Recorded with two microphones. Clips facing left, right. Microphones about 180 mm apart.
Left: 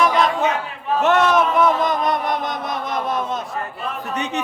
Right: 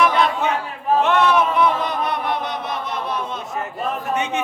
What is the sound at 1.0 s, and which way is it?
Chant, 45° left (ahead or behind).